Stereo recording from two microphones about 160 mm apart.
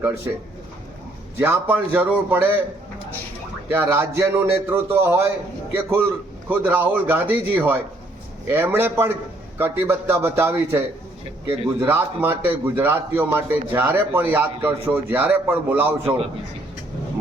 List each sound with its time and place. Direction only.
0.3 s a man's voice: 15° right (ahead or behind)
3.7 s a man's voice: 15° right (ahead or behind)
6.5 s a man's voice: 10° right (ahead or behind)